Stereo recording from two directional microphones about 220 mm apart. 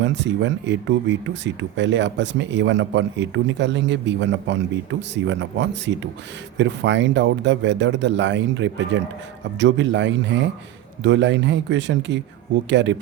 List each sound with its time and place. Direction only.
0.0 s speech: 55° right (ahead or behind)